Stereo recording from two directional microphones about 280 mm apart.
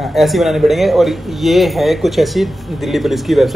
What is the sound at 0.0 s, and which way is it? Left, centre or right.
A man's voice, centre.